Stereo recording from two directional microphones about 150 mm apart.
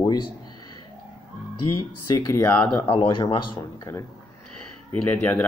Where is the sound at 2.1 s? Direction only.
20° left (ahead or behind).